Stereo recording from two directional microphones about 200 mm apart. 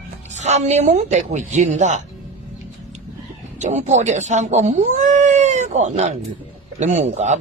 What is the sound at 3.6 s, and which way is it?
Speech, 35° right (ahead or behind).